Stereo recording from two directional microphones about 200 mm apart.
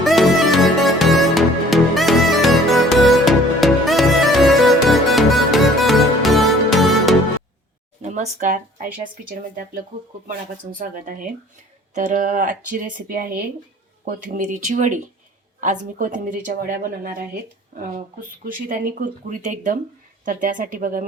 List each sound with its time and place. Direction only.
0.0 s music: centre (ahead or behind)
8.0 s speech: 35° right (ahead or behind)
10.2 s speech: 45° right (ahead or behind)